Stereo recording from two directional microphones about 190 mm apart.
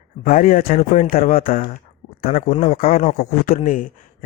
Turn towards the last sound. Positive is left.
turn(degrees=45)  # may be behind; listen again after turning